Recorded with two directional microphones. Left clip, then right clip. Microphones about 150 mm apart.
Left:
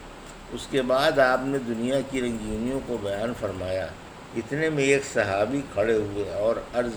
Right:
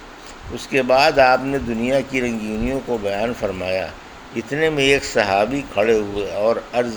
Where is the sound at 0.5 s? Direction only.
35° right (ahead or behind).